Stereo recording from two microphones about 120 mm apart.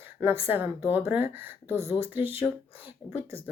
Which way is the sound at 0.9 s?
15° right (ahead or behind).